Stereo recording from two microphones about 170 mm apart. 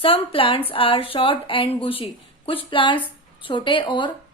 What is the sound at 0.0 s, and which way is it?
A woman's voice, 35° left (ahead or behind).